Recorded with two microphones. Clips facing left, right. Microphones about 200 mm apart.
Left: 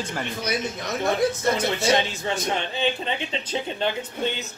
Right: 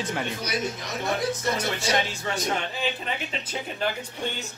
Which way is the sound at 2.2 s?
25° left (ahead or behind).